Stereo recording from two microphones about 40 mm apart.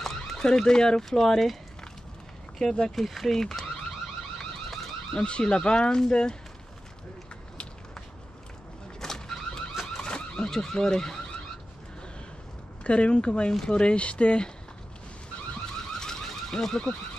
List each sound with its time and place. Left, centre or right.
0.3 s speech: centre
2.6 s speech: left
3.0 s speech: centre
4.4 s car alarm: centre
5.2 s speech: left
9.0 s vehicle: centre
9.8 s car alarm: left
12.8 s speech: left
15.9 s car alarm: centre